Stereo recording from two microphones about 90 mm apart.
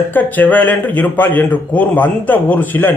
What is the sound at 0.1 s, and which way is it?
A man's voice, 20° left (ahead or behind).